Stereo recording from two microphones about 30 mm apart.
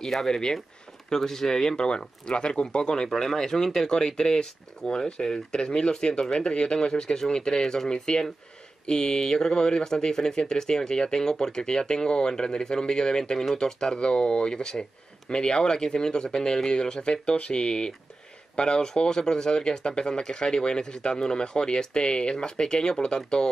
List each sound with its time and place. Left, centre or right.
0.3 s speech: left
1.1 s speech: centre
1.6 s speech: left
17.0 s speech: left